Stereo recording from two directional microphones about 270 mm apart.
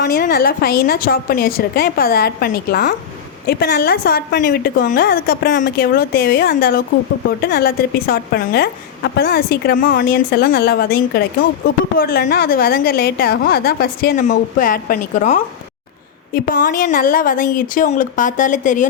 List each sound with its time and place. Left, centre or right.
0.0 s a woman's voice: left